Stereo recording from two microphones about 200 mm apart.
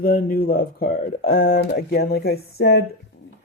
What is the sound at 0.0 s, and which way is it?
Speech, 45° left (ahead or behind).